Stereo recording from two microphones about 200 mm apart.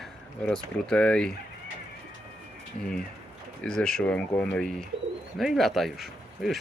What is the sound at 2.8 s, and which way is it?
Speech, centre (ahead or behind).